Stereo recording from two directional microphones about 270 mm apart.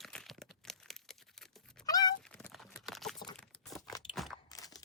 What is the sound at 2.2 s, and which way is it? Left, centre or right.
Clip-clop, centre.